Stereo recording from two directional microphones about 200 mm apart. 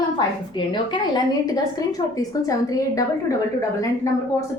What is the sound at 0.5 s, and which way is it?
A woman's voice, 25° left (ahead or behind).